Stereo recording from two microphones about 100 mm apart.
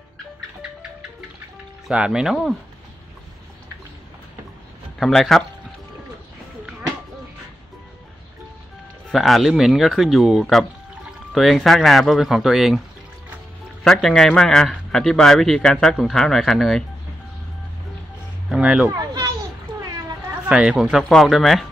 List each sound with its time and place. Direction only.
1.9 s a man's voice: 5° right (ahead or behind)
4.9 s speech: centre (ahead or behind)
9.1 s a man's voice: centre (ahead or behind)
13.8 s a man's voice: 5° left (ahead or behind)
18.5 s speech: 10° right (ahead or behind)
18.9 s children playing: 35° right (ahead or behind)
20.4 s speech: 10° right (ahead or behind)
20.8 s a man's voice: 5° left (ahead or behind)